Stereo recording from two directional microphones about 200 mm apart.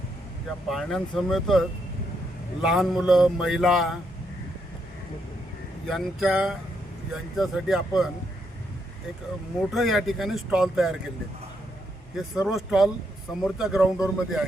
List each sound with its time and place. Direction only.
0.7 s speech: centre (ahead or behind)
5.9 s speech: centre (ahead or behind)
9.7 s speech: centre (ahead or behind)
12.1 s speech: centre (ahead or behind)